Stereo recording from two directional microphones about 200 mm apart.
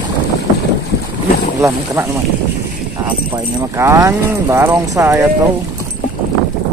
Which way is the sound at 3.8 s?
15° right (ahead or behind).